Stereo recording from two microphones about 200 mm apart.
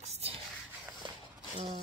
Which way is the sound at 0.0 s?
30° right (ahead or behind).